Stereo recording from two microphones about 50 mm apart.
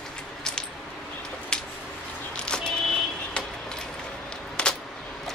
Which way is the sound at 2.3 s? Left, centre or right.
Centre.